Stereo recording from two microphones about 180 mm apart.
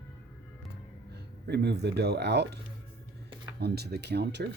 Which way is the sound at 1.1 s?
70° right (ahead or behind).